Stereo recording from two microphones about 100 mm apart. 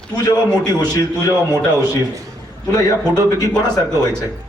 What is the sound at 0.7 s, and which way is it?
Speech, 35° left (ahead or behind).